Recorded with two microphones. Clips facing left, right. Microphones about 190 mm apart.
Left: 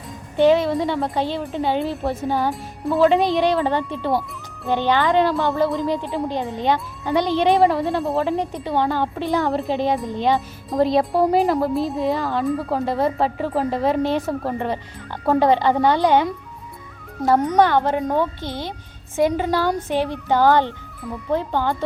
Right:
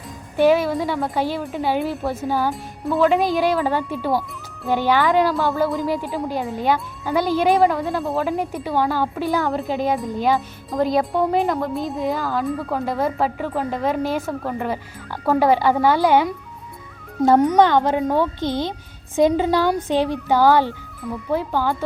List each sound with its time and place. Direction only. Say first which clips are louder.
0.4 s speech: left 1 dB; 5° right (ahead or behind)
17.6 s speech: right 1 dB; 15° right (ahead or behind)